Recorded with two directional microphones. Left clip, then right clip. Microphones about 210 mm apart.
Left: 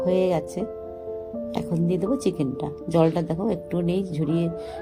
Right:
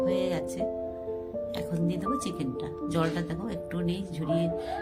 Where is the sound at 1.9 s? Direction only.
5° left (ahead or behind).